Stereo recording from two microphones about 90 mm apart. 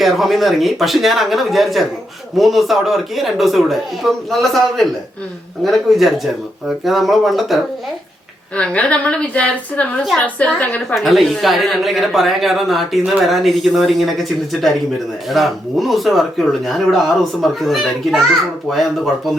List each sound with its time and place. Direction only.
0.0 s speech: centre (ahead or behind)
8.5 s a woman's voice: 15° left (ahead or behind)
10.9 s speech: centre (ahead or behind)